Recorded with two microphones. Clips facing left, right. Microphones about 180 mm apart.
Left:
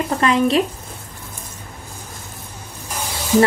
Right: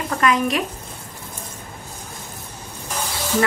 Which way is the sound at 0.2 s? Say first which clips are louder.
Left 2 dB; 30° left (ahead or behind).